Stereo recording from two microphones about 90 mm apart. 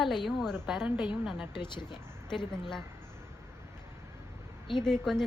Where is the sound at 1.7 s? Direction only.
55° left (ahead or behind).